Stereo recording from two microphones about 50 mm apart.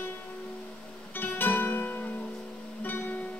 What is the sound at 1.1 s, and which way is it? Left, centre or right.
Music, left.